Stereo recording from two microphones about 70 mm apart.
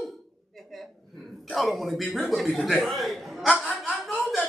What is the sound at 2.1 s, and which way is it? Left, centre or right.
Speech, centre.